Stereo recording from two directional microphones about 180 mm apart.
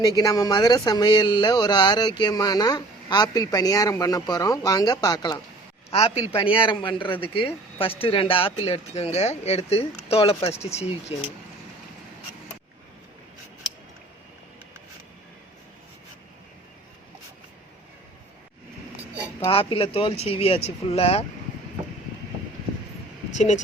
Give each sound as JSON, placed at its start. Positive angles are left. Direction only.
{"t": 0.2, "sound": "speech", "side_deg": 20}
{"t": 5.9, "sound": "speech", "side_deg": 35}
{"t": 19.5, "sound": "speech", "side_deg": 30}
{"t": 23.3, "sound": "speech", "side_deg": 40}